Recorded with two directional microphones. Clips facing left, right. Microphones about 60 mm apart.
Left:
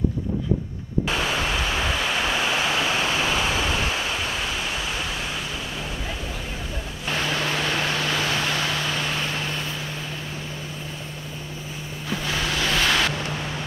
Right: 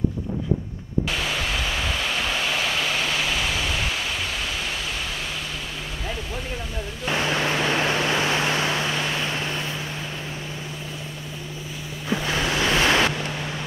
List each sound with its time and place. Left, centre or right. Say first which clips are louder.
1.0 s waterfall: left 4 dB; left
3.5 s pink noise: left 2 dB; left
7.3 s vehicle: right 2 dB; right
12.1 s waves: right 3 dB; right